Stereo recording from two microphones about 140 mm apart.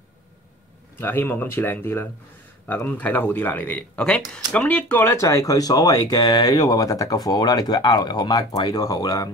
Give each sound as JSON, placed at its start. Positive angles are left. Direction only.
{"t": 0.9, "sound": "speech", "side_deg": 15}